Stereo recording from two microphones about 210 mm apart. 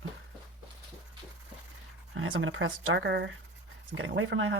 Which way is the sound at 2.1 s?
70° right (ahead or behind).